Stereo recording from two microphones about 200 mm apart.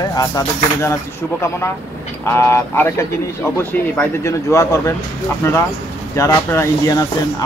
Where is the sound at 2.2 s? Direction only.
15° left (ahead or behind).